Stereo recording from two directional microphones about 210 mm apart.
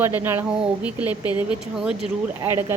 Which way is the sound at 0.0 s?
10° right (ahead or behind).